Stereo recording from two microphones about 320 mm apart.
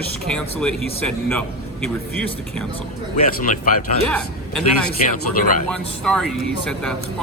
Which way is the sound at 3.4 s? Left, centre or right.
Left.